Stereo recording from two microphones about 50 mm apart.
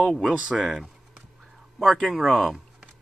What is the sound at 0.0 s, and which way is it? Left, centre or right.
Speech, centre.